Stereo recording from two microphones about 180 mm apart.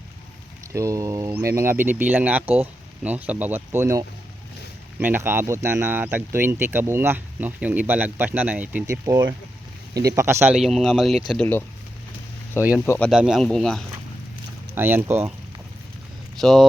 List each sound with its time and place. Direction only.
0.7 s speech: 15° right (ahead or behind)
10.6 s speech: centre (ahead or behind)
12.8 s speech: 15° left (ahead or behind)
13.1 s speech: 5° right (ahead or behind)
14.8 s speech: 10° right (ahead or behind)
16.4 s speech: centre (ahead or behind)